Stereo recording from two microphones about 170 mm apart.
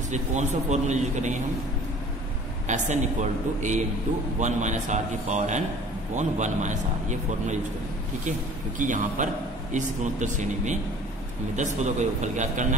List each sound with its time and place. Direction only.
0.1 s a man's voice: 45° right (ahead or behind)
2.7 s a man's voice: 45° right (ahead or behind)